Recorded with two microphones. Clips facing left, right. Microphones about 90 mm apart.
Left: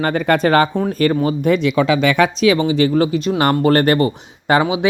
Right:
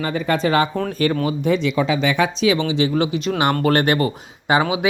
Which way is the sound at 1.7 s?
80° left.